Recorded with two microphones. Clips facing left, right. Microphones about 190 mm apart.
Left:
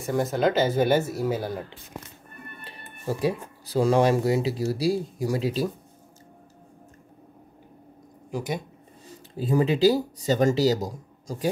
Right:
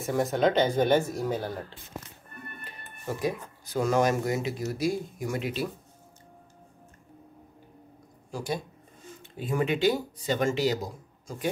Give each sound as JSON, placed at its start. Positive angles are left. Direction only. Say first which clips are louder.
{"t": 0.0, "sound": "speech", "louder": "left 1 dB", "side_deg": 0}
{"t": 2.6, "sound": "speech", "louder": "left 6 dB", "side_deg": 30}
{"t": 8.3, "sound": "speech", "louder": "left 2 dB", "side_deg": 20}
{"t": 9.1, "sound": "speech", "louder": "left 7 dB", "side_deg": 35}